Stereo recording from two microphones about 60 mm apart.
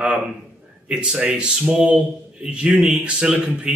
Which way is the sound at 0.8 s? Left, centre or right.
Centre.